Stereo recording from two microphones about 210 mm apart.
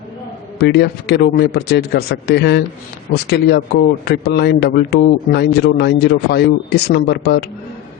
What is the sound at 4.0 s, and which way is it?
A man's voice, 50° left (ahead or behind).